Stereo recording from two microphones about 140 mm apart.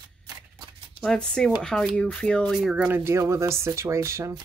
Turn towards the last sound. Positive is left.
turn(degrees=-20)  # may be behind; listen again after turning